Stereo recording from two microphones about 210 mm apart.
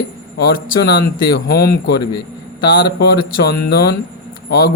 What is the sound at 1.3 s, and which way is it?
Speech, 50° left (ahead or behind).